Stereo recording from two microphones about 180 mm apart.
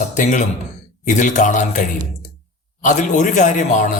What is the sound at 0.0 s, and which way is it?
A man's voice, 45° left (ahead or behind).